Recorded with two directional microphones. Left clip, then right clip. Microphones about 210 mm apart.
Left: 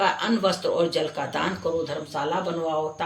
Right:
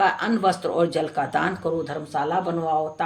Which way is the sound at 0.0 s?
55° right (ahead or behind).